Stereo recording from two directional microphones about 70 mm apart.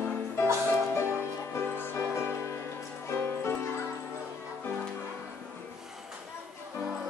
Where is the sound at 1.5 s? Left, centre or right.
Left.